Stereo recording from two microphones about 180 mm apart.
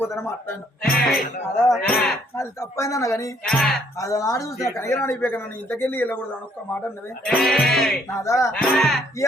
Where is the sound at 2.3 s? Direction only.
15° left (ahead or behind).